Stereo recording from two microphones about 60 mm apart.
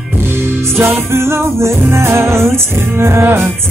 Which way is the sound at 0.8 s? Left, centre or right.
Right.